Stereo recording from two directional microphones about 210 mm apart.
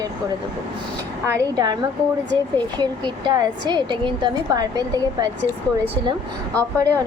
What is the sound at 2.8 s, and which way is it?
A woman's voice, 20° right (ahead or behind).